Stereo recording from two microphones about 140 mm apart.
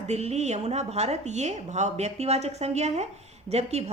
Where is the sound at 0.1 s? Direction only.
50° right (ahead or behind).